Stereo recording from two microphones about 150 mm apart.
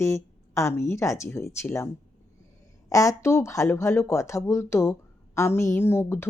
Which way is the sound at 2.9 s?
20° left (ahead or behind).